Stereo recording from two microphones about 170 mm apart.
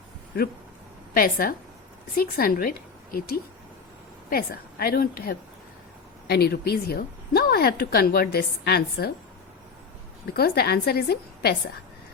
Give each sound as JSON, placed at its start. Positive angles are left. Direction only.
{"t": 1.1, "sound": "a woman's voice", "side_deg": 60}
{"t": 10.2, "sound": "a woman's voice", "side_deg": 70}